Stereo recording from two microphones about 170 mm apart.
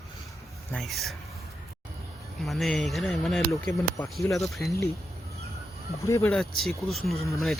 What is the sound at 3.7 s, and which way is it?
Speech, 15° left (ahead or behind).